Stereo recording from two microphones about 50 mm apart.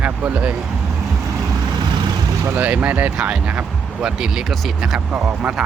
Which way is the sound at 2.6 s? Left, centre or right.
Right.